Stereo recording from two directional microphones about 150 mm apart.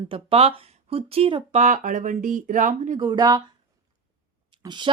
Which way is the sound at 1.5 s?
55° right (ahead or behind).